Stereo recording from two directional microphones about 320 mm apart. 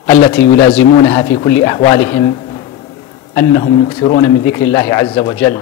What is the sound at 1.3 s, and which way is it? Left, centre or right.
A man's voice, centre.